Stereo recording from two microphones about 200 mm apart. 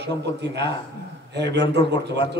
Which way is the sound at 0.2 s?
60° right (ahead or behind).